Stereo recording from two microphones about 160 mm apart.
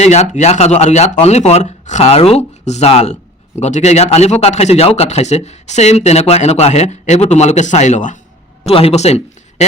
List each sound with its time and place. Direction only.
0.0 s speech: 45° left (ahead or behind)
8.6 s speech: 40° left (ahead or behind)